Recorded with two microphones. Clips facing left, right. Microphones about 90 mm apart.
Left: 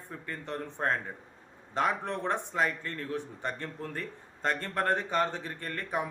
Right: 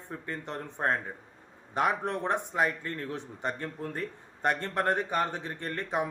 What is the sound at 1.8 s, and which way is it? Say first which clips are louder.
A man's voice: right 2 dB; 15° right (ahead or behind).